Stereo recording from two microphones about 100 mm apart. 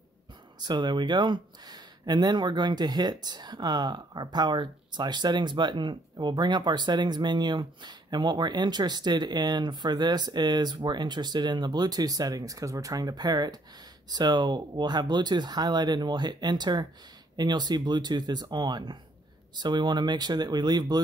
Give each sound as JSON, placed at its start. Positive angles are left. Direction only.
{"t": 0.6, "sound": "speech", "side_deg": -50}